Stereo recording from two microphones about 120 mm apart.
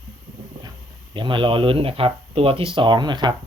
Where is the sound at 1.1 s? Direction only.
45° right (ahead or behind).